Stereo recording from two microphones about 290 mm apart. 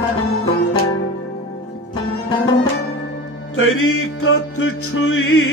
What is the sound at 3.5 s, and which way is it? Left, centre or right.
Music, left.